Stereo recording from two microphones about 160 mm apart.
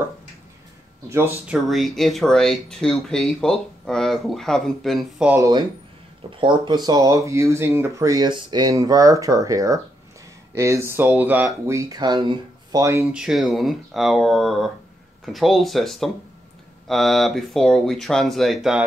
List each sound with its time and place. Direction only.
1.0 s speech: 15° right (ahead or behind)
1.5 s speech: centre (ahead or behind)
5.3 s speech: 20° right (ahead or behind)
13.1 s speech: 5° right (ahead or behind)